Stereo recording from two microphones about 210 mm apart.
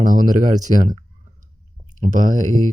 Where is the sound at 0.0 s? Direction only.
40° right (ahead or behind).